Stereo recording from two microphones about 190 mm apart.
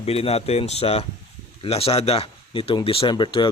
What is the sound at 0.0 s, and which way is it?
Speech, 30° left (ahead or behind).